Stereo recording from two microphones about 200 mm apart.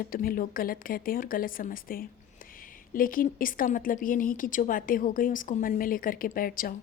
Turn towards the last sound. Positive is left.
turn(degrees=45)  # may be behind; listen again after turning